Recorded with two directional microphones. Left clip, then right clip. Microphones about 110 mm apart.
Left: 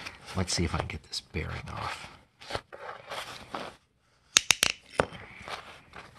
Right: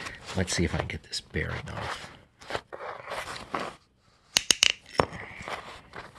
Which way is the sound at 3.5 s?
40° right (ahead or behind).